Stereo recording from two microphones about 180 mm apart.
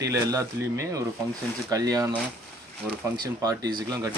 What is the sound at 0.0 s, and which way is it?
Speech, 20° right (ahead or behind).